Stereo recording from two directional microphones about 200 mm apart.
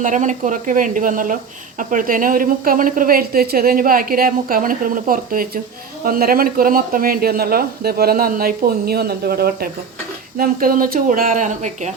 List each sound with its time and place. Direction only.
0.0 s a woman's voice: 40° right (ahead or behind)